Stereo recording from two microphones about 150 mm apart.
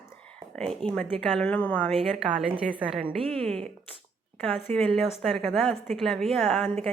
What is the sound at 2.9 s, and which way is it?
Speech, 35° right (ahead or behind).